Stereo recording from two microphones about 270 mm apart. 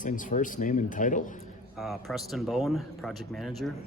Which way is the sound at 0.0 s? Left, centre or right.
Left.